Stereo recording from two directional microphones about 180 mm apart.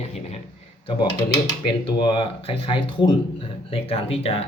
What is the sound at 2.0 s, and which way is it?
Speech, 30° left (ahead or behind).